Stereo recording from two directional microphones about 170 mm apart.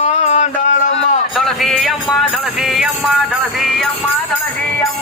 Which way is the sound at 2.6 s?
Centre (ahead or behind).